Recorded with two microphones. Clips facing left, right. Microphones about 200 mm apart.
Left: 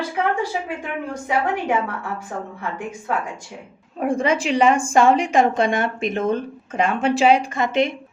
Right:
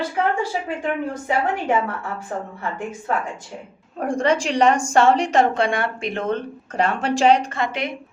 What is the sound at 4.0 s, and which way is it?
A woman's voice, 5° left (ahead or behind).